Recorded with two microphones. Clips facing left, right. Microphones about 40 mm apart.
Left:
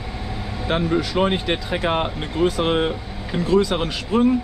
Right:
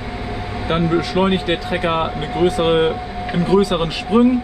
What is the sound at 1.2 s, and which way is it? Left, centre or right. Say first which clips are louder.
Speech: right 3 dB; right.